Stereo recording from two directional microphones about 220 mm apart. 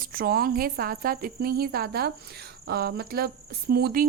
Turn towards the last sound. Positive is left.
turn(degrees=-45)  # may be behind; listen again after turning